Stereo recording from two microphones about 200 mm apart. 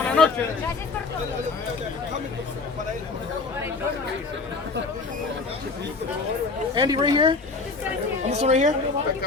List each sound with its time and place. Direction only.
0.0 s a sound: 10° left (ahead or behind)
6.7 s speech: 20° right (ahead or behind)
8.3 s a woman's voice: 35° right (ahead or behind)